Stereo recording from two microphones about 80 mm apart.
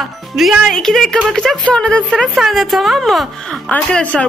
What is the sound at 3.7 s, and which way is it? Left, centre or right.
Speech, centre.